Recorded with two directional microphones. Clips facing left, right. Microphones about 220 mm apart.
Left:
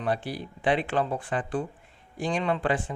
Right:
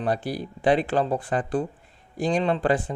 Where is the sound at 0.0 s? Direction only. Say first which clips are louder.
Right 3 dB; 40° right (ahead or behind).